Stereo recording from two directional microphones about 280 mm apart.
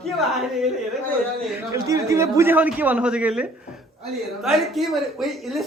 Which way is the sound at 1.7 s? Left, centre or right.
Centre.